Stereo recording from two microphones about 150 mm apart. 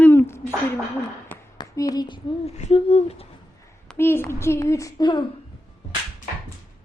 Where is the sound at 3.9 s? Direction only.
15° left (ahead or behind).